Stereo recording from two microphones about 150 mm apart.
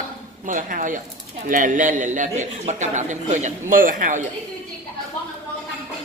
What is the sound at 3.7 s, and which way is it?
Speech, 65° right (ahead or behind).